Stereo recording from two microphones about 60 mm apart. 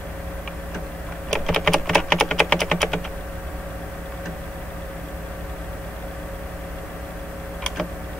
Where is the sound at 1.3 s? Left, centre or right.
Centre.